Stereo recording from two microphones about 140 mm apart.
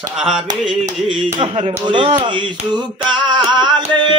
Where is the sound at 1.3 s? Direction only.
35° right (ahead or behind).